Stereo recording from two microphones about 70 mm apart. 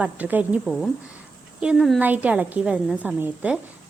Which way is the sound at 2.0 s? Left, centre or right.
Right.